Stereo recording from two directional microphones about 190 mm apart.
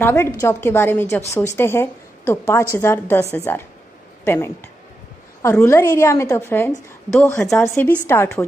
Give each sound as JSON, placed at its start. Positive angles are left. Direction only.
{"t": 0.0, "sound": "a woman's voice", "side_deg": 15}